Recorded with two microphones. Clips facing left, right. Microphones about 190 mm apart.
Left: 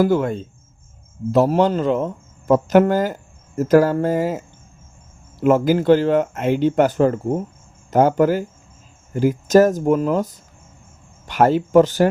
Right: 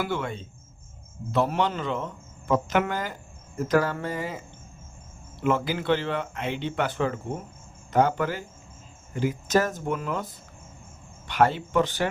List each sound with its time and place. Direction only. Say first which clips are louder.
0.0 s speech: left 12 dB; 40° left (ahead or behind)